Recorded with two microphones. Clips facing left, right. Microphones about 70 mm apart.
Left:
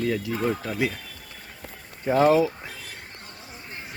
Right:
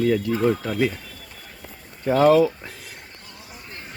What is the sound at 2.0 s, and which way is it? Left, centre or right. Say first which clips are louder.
Speech: right 3 dB; left.